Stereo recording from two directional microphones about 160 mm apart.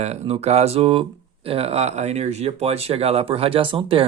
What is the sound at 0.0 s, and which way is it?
Speech, 45° right (ahead or behind).